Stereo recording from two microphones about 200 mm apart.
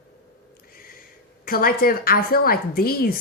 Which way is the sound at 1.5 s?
45° left (ahead or behind).